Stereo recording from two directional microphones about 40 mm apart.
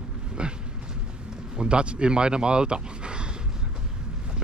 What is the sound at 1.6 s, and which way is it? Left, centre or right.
Speech, right.